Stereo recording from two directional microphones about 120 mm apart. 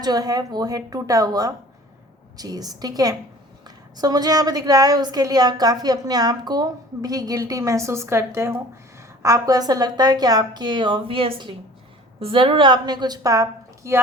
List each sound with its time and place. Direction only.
0.0 s a woman's voice: 35° right (ahead or behind)